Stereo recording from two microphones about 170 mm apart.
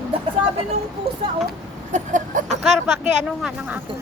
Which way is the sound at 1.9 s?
45° right (ahead or behind).